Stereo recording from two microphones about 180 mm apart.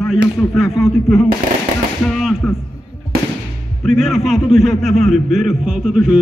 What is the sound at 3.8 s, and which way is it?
A man's voice, centre (ahead or behind).